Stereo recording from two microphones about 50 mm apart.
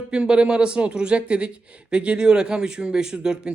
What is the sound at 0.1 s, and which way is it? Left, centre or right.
Speech, centre.